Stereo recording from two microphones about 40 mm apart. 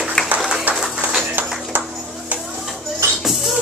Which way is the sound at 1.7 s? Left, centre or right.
Right.